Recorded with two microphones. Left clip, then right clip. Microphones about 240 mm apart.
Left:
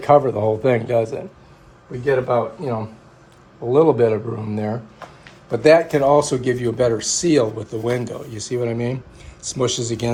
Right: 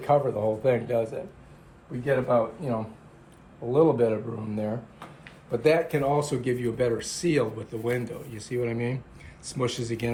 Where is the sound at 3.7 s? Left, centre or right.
Left.